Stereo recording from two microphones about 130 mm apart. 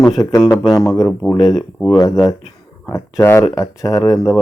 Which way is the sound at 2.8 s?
20° left (ahead or behind).